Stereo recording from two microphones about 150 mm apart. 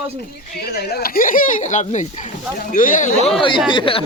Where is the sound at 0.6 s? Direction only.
90° left; by 3.3 s 55° left (ahead or behind).